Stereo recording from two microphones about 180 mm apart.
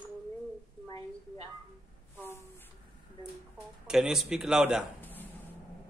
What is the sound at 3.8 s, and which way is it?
Speech, 5° right (ahead or behind).